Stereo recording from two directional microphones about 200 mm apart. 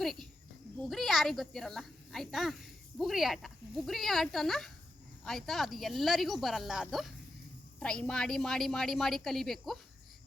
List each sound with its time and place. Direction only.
0.0 s cricket: centre (ahead or behind)
0.9 s a woman's voice: centre (ahead or behind)